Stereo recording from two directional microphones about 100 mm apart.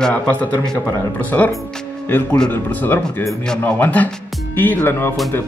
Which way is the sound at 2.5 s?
20° left (ahead or behind).